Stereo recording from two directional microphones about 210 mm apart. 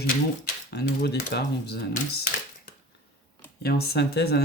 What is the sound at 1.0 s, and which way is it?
Speech, 50° left (ahead or behind).